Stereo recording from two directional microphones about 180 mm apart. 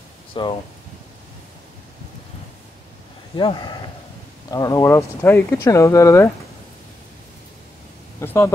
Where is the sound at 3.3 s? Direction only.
25° left (ahead or behind).